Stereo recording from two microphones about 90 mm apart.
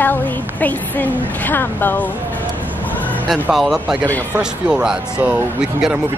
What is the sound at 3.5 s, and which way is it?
Speech, 5° right (ahead or behind).